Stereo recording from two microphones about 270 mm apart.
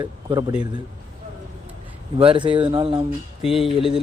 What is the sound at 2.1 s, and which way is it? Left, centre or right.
Speech, centre.